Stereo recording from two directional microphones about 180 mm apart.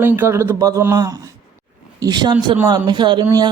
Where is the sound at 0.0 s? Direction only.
10° right (ahead or behind).